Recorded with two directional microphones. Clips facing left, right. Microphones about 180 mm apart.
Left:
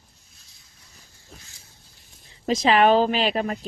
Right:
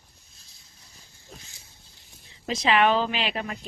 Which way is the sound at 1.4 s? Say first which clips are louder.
Even; 20° right (ahead or behind).